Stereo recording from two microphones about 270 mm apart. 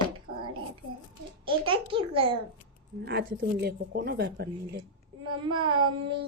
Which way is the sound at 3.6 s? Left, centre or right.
Right.